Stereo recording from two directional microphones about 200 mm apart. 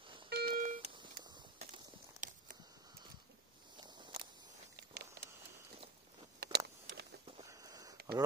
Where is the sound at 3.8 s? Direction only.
20° right (ahead or behind).